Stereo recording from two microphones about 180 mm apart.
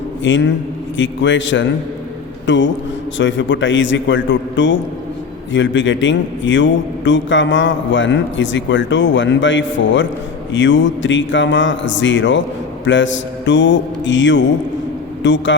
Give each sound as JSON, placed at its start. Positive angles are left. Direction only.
{"t": 0.3, "sound": "a man's voice", "side_deg": 90}
{"t": 12.8, "sound": "mantra", "side_deg": 90}
{"t": 15.2, "sound": "a man's voice", "side_deg": 90}